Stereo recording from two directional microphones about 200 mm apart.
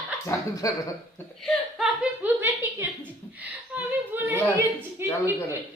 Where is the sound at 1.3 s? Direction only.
Centre (ahead or behind).